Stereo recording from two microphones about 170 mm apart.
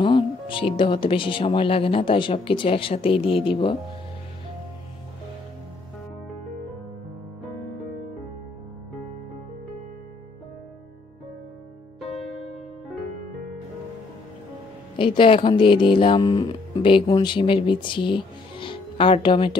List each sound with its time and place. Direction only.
0.0 s speech: 25° left (ahead or behind)
15.0 s speech: 30° left (ahead or behind)